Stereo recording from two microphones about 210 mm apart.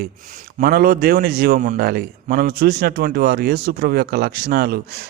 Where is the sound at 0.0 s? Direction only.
40° right (ahead or behind).